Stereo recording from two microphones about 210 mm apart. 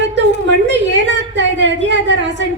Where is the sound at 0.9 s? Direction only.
60° right (ahead or behind).